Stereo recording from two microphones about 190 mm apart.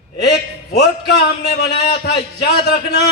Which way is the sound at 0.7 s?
55° left (ahead or behind).